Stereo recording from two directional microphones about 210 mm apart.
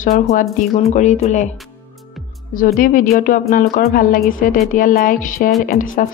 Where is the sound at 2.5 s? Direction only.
40° left (ahead or behind).